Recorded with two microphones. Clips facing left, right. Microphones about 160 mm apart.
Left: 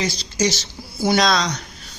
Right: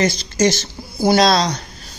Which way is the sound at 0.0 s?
50° right (ahead or behind).